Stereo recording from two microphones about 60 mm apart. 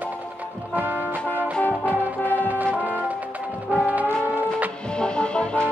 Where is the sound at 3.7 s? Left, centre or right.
Right.